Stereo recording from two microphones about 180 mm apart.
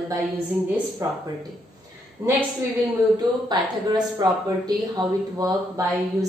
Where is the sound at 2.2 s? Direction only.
15° right (ahead or behind).